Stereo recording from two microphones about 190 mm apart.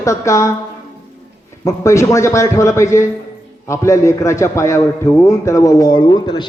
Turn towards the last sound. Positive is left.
turn(degrees=25)  # may be behind; listen again after turning